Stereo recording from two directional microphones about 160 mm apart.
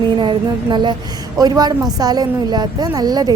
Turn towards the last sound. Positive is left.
turn(degrees=-25)  # may be behind; listen again after turning